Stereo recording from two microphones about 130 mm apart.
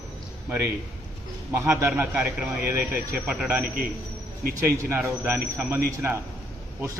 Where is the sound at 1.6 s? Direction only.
20° right (ahead or behind).